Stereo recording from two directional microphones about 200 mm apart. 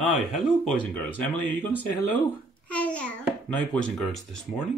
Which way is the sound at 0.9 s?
10° left (ahead or behind).